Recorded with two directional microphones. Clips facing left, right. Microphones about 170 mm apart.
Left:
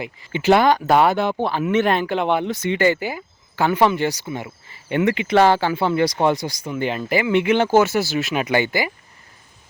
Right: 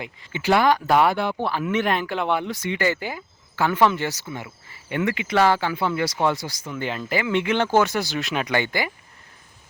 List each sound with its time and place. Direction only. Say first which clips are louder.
0.3 s speech: left 4 dB; 20° left (ahead or behind)